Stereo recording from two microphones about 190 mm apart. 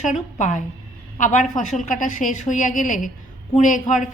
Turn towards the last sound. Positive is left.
turn(degrees=40)  # may be behind; listen again after turning